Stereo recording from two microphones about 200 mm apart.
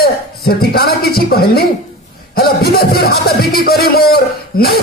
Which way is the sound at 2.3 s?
50° left (ahead or behind).